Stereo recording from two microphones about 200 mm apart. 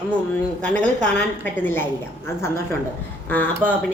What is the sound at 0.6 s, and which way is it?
A woman's voice, 5° left (ahead or behind).